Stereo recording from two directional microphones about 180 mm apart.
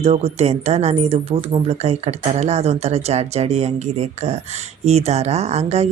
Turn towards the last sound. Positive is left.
turn(degrees=-35)  # may be behind; listen again after turning